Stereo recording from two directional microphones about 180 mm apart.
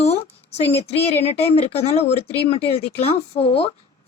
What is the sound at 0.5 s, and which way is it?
A woman's voice, 35° left (ahead or behind).